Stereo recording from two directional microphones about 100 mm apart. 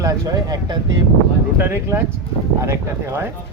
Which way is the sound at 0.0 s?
35° right (ahead or behind).